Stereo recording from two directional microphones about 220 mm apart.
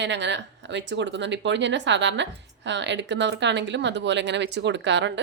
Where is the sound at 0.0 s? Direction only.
55° right (ahead or behind).